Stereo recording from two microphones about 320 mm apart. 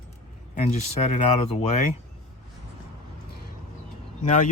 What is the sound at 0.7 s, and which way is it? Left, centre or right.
Speech, centre.